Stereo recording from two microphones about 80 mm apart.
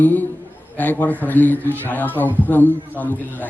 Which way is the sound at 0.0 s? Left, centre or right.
Left.